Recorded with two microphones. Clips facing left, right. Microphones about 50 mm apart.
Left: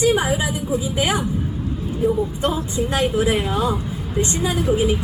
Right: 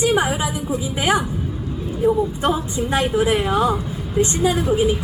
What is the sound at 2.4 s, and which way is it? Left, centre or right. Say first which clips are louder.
A woman's voice: right 1 dB; right.